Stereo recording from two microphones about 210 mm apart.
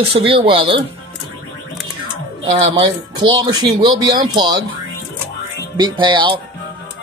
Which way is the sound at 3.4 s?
20° right (ahead or behind).